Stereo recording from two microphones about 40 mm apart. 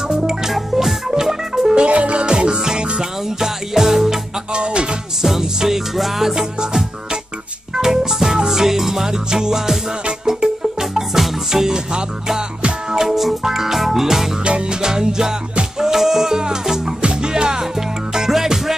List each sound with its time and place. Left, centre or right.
0.1 s music: centre
0.5 s music: centre
1.8 s music: right; by 4.2 s centre
4.6 s music: right
5.2 s music: centre
7.7 s music: centre
14.4 s music: right